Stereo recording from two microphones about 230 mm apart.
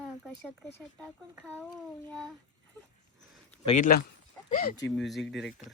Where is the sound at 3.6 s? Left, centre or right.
Left.